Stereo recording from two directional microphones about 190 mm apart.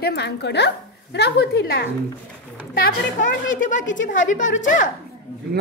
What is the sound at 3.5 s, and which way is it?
A man's voice, 40° left (ahead or behind).